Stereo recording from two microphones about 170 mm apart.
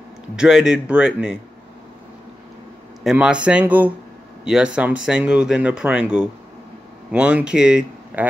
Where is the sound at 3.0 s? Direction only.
5° right (ahead or behind).